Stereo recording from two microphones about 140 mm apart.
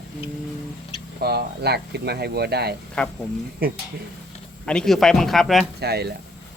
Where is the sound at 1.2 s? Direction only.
90° right.